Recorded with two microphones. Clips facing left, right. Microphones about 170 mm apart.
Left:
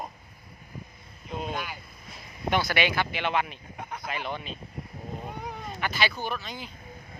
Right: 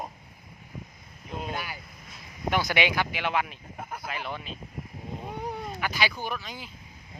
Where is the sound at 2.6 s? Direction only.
15° right (ahead or behind).